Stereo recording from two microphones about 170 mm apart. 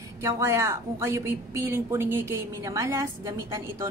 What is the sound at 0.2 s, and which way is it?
A woman's voice, 15° right (ahead or behind).